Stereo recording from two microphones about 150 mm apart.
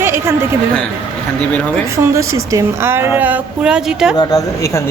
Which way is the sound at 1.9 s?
20° right (ahead or behind).